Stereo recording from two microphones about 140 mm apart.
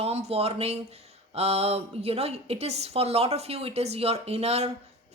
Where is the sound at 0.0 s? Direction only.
45° right (ahead or behind).